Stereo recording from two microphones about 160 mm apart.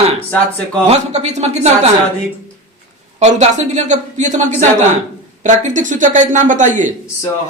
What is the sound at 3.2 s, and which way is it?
Speech, 45° right (ahead or behind).